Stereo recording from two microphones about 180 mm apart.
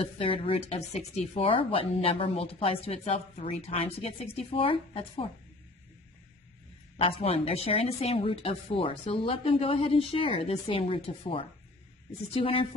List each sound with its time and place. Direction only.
0.0 s speech: 30° left (ahead or behind)
6.9 s speech: 35° left (ahead or behind)